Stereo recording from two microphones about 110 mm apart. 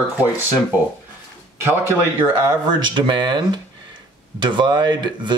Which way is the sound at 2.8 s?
45° right (ahead or behind).